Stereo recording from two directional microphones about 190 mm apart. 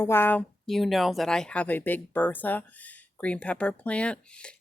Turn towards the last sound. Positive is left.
turn(degrees=5)  # may be behind; listen again after turning